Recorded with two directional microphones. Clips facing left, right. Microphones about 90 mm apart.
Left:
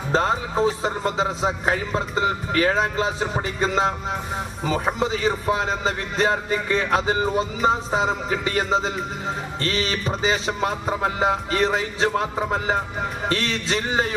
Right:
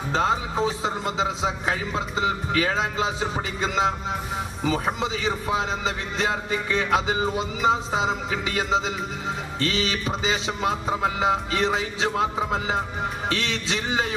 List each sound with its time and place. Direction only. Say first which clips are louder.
0.1 s a man's voice: left 2 dB; 40° left (ahead or behind)
9.6 s music: even; 40° left (ahead or behind)
10.2 s a man's voice: left 3 dB; 35° left (ahead or behind)